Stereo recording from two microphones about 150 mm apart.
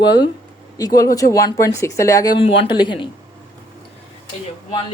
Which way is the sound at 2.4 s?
35° left (ahead or behind).